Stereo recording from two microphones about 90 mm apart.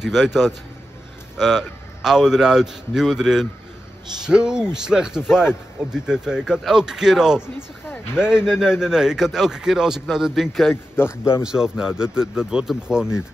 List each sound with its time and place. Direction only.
0.1 s a man's voice: 5° right (ahead or behind)
10.7 s speech: 25° left (ahead or behind)
11.4 s a man's voice: 5° right (ahead or behind)